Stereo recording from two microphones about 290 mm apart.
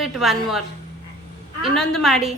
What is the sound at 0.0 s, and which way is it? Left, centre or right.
Speech, centre.